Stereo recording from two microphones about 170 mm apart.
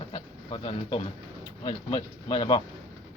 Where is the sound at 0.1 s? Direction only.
30° left (ahead or behind).